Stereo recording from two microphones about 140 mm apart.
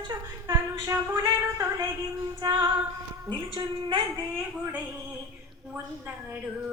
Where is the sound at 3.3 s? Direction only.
35° right (ahead or behind).